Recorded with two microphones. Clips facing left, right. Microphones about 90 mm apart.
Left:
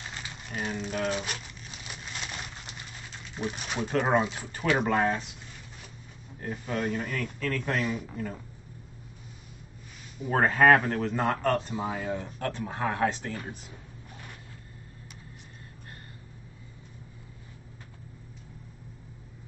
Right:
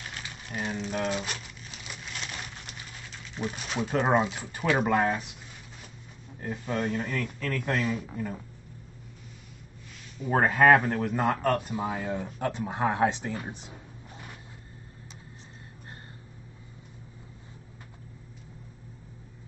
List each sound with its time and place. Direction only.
0.0 s speech: 5° left (ahead or behind)
2.1 s a sound: centre (ahead or behind)
3.3 s a man's voice: 5° left (ahead or behind)
6.4 s a man's voice: 5° right (ahead or behind)
10.3 s a man's voice: 5° right (ahead or behind)